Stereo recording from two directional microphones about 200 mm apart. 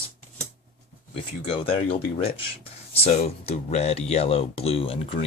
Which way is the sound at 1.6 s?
30° left (ahead or behind).